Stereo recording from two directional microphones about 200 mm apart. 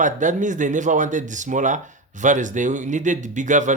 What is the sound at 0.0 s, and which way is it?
Speech, 40° right (ahead or behind).